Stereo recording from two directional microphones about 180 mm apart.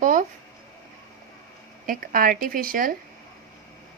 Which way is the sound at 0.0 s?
45° right (ahead or behind).